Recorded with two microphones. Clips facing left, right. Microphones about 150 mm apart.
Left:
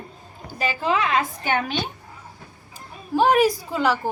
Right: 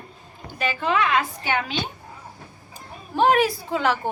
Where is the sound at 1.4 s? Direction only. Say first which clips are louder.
Left 2 dB; 45° left (ahead or behind).